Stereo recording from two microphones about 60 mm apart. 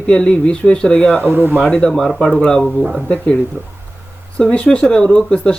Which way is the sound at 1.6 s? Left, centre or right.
Centre.